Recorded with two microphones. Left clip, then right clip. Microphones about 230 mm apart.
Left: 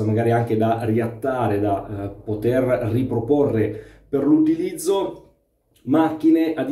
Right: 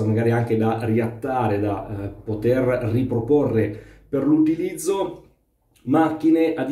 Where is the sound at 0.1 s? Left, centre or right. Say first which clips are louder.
Left 2 dB; centre.